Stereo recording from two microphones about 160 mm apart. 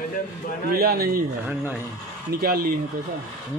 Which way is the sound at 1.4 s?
10° right (ahead or behind).